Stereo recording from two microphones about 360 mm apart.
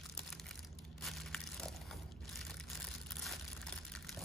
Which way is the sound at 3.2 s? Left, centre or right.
Centre.